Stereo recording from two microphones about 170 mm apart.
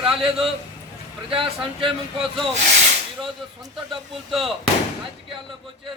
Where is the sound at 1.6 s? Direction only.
Centre (ahead or behind).